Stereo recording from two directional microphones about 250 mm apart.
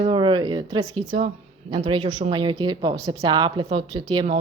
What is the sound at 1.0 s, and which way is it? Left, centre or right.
Speech, right.